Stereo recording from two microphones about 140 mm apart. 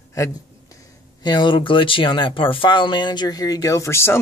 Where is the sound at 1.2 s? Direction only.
35° left (ahead or behind); by 4.2 s 20° left (ahead or behind).